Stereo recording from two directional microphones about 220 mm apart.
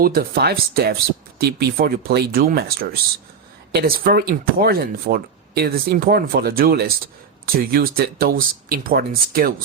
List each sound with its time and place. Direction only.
0.0 s speech: 40° right (ahead or behind)